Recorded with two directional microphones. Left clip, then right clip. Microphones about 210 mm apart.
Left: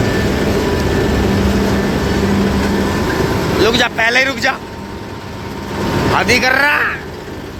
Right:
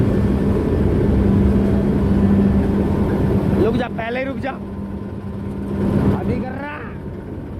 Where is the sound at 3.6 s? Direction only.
10° right (ahead or behind).